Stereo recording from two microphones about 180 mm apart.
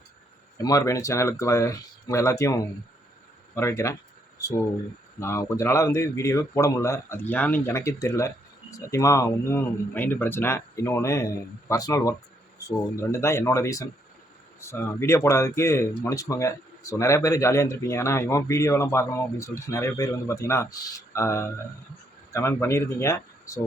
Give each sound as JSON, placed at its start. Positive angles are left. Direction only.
{"t": 0.6, "sound": "speech", "side_deg": 20}
{"t": 5.2, "sound": "speech", "side_deg": 15}